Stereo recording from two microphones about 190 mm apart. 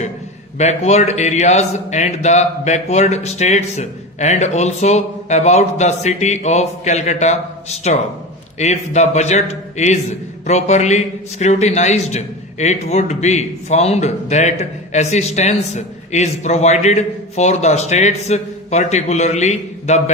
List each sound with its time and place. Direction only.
0.6 s a man's voice: 35° left (ahead or behind)